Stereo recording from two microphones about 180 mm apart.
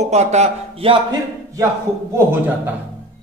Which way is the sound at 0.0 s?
40° right (ahead or behind).